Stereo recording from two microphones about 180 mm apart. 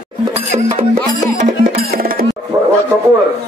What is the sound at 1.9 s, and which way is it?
Music, 55° right (ahead or behind).